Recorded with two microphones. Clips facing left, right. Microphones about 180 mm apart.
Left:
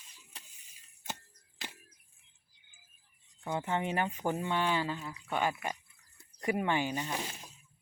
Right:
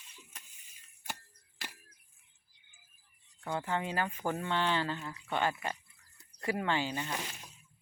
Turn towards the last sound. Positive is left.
turn(degrees=15)  # may be behind; listen again after turning